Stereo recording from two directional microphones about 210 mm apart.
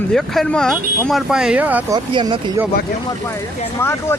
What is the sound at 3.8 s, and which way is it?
Speech, 10° left (ahead or behind).